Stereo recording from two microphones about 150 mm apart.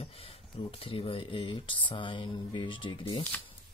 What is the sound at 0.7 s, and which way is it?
Speech, 40° left (ahead or behind).